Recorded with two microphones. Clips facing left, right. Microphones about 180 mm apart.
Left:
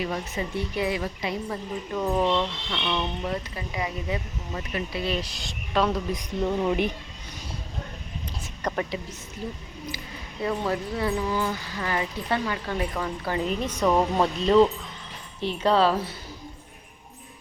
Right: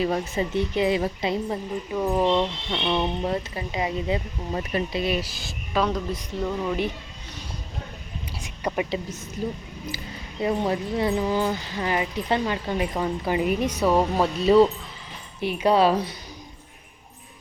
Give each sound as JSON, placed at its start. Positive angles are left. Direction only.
{"t": 0.0, "sound": "speech", "side_deg": -25}
{"t": 1.9, "sound": "speech", "side_deg": -10}
{"t": 5.1, "sound": "speech", "side_deg": -5}
{"t": 6.4, "sound": "speech", "side_deg": 25}
{"t": 8.6, "sound": "a woman's voice", "side_deg": -10}
{"t": 10.4, "sound": "speech", "side_deg": -20}